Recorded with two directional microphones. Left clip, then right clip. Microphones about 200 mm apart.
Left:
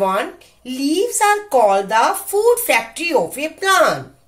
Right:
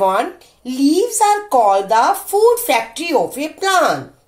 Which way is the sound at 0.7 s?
15° right (ahead or behind).